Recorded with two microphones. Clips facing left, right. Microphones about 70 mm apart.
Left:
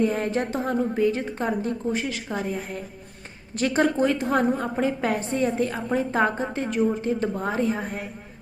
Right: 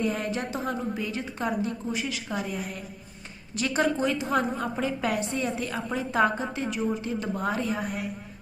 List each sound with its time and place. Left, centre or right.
0.0 s a woman's voice: left